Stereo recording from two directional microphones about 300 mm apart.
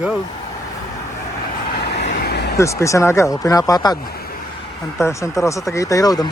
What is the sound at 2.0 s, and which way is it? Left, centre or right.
Vehicle, left.